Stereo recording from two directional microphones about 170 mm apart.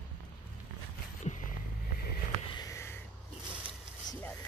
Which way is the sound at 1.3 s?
35° left (ahead or behind).